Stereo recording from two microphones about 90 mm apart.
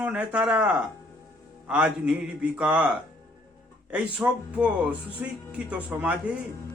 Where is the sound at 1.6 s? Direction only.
10° right (ahead or behind).